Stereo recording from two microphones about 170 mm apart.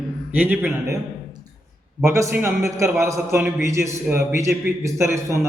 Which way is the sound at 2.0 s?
15° right (ahead or behind).